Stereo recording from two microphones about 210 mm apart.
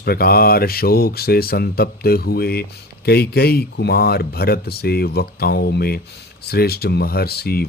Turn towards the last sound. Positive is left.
turn(degrees=45)  # may be behind; listen again after turning